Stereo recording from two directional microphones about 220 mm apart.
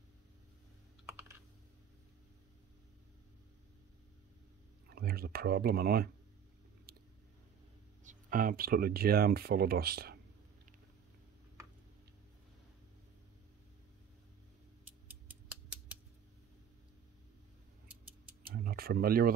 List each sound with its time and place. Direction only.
4.8 s speech: 45° right (ahead or behind)
8.0 s speech: 35° right (ahead or behind)
15.0 s scissors: 5° right (ahead or behind)
18.5 s a sound: 40° right (ahead or behind)